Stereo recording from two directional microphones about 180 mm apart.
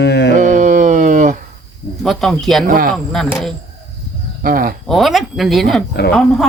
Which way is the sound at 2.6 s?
55° right (ahead or behind).